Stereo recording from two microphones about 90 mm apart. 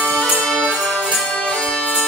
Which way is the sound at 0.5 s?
5° left (ahead or behind).